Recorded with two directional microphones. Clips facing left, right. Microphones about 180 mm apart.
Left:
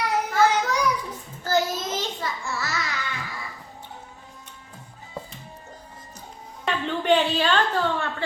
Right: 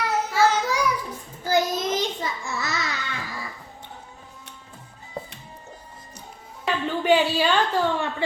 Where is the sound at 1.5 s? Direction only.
15° right (ahead or behind).